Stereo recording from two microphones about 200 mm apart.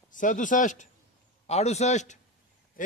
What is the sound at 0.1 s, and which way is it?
Speech, 40° left (ahead or behind).